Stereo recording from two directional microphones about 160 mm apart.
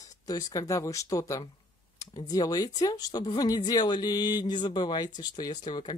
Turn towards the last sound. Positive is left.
turn(degrees=25)  # may be behind; listen again after turning